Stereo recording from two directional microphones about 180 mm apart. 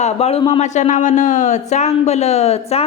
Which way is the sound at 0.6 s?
40° left (ahead or behind).